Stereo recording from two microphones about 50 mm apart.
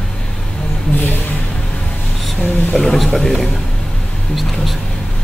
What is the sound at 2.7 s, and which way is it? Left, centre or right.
Speech, centre.